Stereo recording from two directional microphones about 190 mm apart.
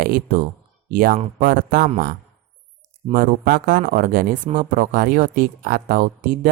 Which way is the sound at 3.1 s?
50° right (ahead or behind).